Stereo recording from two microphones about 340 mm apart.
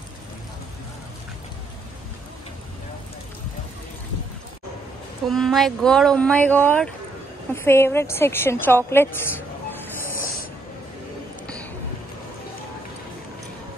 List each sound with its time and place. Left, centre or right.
5.3 s a woman's voice: centre
10.0 s train: left